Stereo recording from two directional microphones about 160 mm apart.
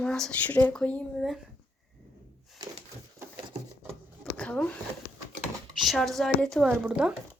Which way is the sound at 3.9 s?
5° left (ahead or behind).